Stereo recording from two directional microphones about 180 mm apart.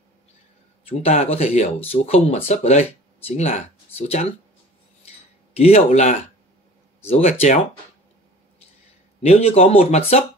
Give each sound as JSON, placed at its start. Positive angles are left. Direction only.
{"t": 0.8, "sound": "speech", "side_deg": 35}
{"t": 5.6, "sound": "speech", "side_deg": 35}
{"t": 9.2, "sound": "speech", "side_deg": 35}